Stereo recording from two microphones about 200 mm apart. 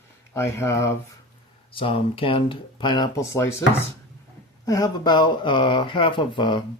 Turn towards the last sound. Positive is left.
turn(degrees=20)  # may be behind; listen again after turning